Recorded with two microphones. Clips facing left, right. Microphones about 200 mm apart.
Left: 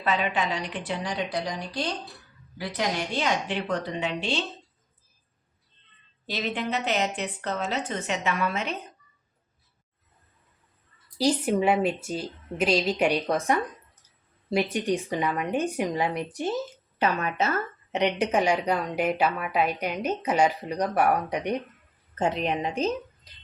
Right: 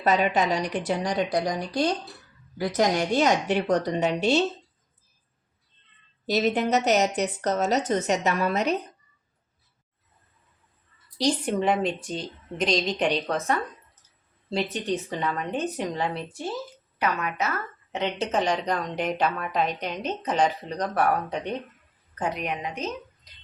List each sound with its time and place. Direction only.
0.0 s a woman's voice: 45° right (ahead or behind)
6.2 s a woman's voice: 40° right (ahead or behind)
11.2 s a woman's voice: 5° left (ahead or behind); by 17.5 s 30° left (ahead or behind)
17.9 s a woman's voice: 15° left (ahead or behind)
22.1 s a woman's voice: 25° left (ahead or behind)